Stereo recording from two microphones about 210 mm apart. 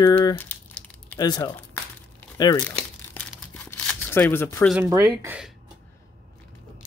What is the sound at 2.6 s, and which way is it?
Crumpling, 5° left (ahead or behind).